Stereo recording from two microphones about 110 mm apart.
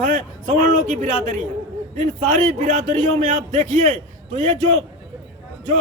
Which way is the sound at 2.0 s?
90° right.